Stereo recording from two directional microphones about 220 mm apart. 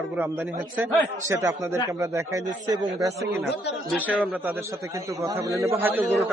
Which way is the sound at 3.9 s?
5° right (ahead or behind).